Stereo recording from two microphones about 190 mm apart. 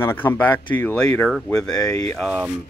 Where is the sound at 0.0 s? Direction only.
10° left (ahead or behind).